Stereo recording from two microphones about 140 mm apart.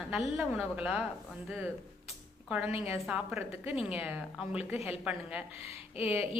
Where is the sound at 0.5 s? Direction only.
5° right (ahead or behind).